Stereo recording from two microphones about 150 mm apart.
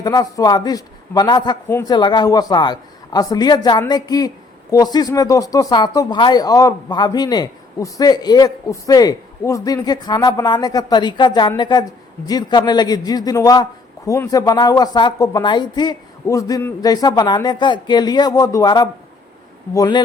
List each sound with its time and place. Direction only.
0.0 s speech: 25° left (ahead or behind)